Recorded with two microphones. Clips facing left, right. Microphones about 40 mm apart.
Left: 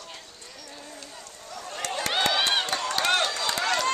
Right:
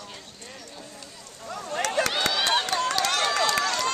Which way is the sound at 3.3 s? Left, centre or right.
Right.